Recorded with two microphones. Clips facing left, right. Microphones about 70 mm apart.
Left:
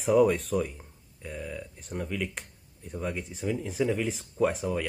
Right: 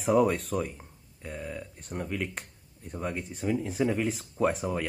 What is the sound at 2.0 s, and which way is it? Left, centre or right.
Speech, centre.